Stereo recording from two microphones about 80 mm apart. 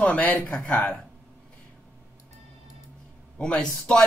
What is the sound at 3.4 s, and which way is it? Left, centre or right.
Speech, centre.